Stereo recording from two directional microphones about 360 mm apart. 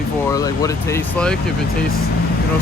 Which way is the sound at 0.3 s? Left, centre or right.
Centre.